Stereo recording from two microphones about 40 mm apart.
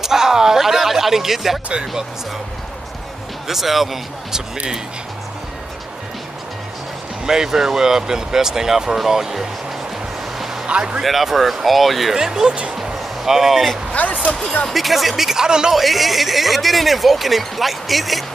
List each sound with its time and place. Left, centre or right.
0.0 s a sound: centre
1.7 s speech: right
3.4 s speech: centre
7.2 s speech: centre
10.7 s speech: right
11.0 s speech: centre
12.2 s speech: centre
12.7 s music: centre
14.0 s speech: left
14.7 s speech: centre
15.7 s speech: centre